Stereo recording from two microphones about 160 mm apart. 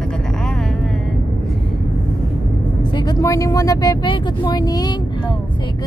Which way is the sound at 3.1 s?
20° left (ahead or behind).